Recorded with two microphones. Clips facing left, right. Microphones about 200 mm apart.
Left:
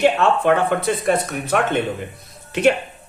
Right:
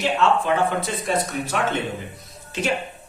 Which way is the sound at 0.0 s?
60° left (ahead or behind).